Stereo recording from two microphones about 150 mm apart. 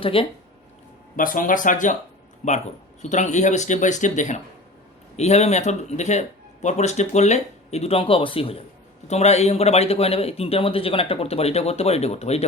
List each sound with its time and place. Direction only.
0.0 s speech: 40° left (ahead or behind)
1.1 s speech: 65° left (ahead or behind); by 12.5 s 45° left (ahead or behind)